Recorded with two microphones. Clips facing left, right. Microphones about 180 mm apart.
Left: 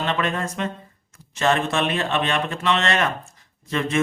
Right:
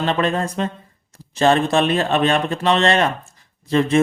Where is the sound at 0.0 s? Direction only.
35° right (ahead or behind).